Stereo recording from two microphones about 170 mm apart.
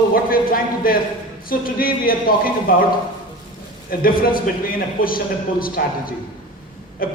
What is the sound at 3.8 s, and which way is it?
A man's voice, 60° left (ahead or behind).